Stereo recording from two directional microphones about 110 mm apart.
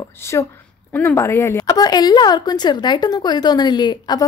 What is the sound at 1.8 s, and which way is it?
A woman's voice, 40° left (ahead or behind).